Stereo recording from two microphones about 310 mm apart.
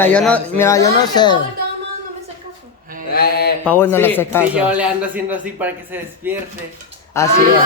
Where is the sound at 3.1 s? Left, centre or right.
Left.